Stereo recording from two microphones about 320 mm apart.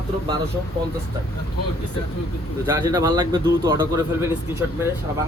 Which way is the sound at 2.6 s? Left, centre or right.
Centre.